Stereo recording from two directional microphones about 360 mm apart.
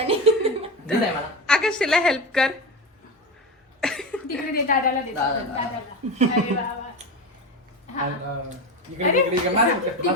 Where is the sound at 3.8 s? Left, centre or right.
Centre.